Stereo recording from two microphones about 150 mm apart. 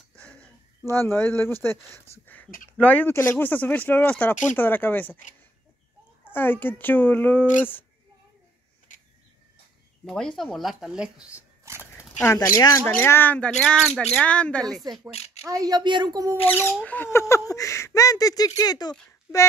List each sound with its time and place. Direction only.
0.2 s a sound: 5° left (ahead or behind)
0.8 s speech: 15° left (ahead or behind)
6.3 s speech: 15° left (ahead or behind)
10.0 s speech: 5° left (ahead or behind)
11.6 s dog: 15° right (ahead or behind)
12.2 s speech: 20° left (ahead or behind); by 14.9 s 5° left (ahead or behind)
15.1 s a sound: 45° left (ahead or behind)
15.4 s speech: 25° right (ahead or behind)
16.8 s speech: 10° left (ahead or behind)